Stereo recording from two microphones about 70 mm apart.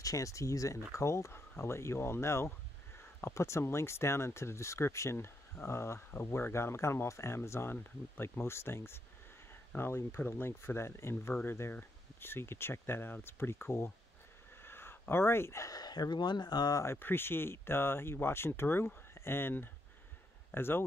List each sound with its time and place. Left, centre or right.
0.0 s speech: left
14.6 s a sound: left
15.7 s speech: left
16.8 s speech: left